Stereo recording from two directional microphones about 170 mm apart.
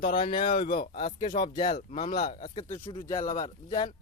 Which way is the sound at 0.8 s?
50° left (ahead or behind).